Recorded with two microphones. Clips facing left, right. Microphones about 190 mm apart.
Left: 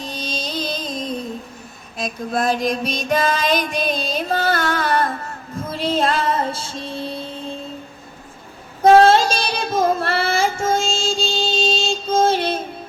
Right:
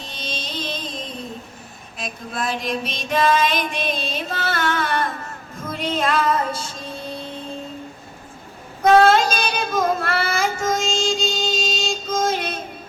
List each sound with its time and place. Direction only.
0.0 s mantra: 40° left (ahead or behind)
2.0 s music: 40° left (ahead or behind)
8.8 s child singing: 30° left (ahead or behind)